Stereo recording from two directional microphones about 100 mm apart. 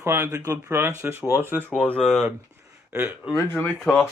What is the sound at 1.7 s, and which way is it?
Speech, 15° left (ahead or behind).